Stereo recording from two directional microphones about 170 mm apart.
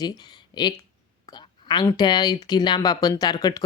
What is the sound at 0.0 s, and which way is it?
Speech, 25° left (ahead or behind).